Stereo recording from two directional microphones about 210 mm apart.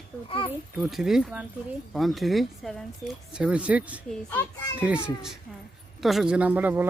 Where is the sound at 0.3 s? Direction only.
25° left (ahead or behind).